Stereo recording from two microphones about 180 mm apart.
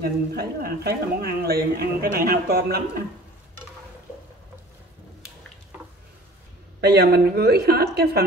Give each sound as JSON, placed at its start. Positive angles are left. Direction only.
{"t": 0.0, "sound": "a man's voice", "side_deg": -60}
{"t": 6.8, "sound": "a man's voice", "side_deg": -65}